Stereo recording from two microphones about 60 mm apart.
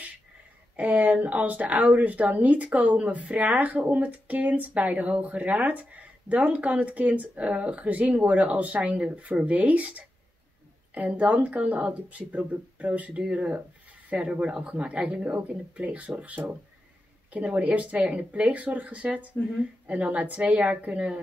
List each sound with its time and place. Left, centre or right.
0.7 s speech: right